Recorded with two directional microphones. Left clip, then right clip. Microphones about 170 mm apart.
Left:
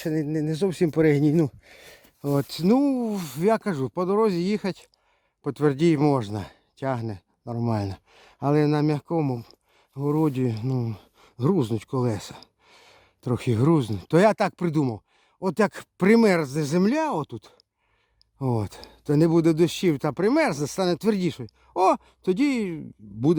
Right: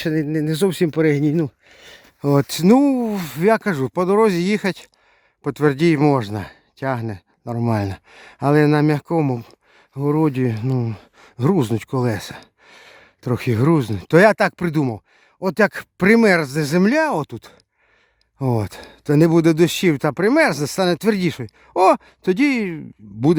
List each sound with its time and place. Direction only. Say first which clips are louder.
0.0 s speech: right 5 dB; 30° right (ahead or behind)
0.9 s speech: right 3 dB; 15° right (ahead or behind)
2.2 s speech: right 8 dB; 30° right (ahead or behind)